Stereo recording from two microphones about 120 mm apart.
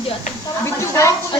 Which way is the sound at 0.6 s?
25° left (ahead or behind).